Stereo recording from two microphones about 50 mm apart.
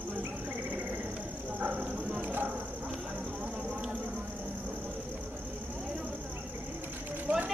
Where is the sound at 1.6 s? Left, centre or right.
Right.